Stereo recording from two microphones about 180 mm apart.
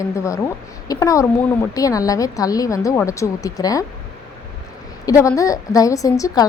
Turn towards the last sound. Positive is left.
turn(degrees=20)  # may be behind; listen again after turning